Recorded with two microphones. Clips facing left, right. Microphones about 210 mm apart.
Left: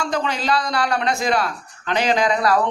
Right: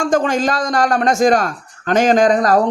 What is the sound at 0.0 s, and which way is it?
A man's voice, 45° right (ahead or behind).